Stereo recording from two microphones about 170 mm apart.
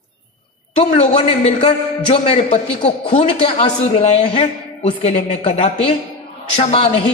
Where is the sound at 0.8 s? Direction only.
40° left (ahead or behind).